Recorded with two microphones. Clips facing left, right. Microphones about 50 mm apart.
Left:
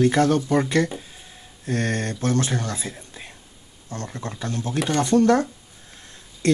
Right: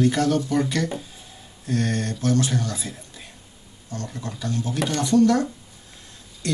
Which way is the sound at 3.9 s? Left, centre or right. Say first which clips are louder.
Left 1 dB; left.